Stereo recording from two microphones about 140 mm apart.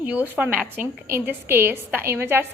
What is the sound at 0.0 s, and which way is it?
A woman's voice, 10° right (ahead or behind).